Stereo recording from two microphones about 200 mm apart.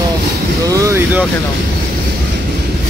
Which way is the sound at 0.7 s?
15° right (ahead or behind).